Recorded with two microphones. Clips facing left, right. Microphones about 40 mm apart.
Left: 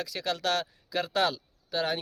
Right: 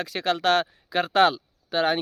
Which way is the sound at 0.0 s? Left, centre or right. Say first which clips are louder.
Right 7 dB; right.